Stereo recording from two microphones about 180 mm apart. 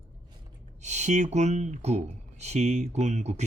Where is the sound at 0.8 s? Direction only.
40° right (ahead or behind).